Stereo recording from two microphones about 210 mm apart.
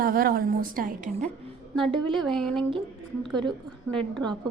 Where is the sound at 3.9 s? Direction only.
5° left (ahead or behind).